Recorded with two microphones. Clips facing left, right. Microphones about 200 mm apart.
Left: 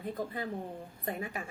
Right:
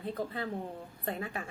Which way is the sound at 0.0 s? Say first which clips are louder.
Right 1 dB; 15° left (ahead or behind).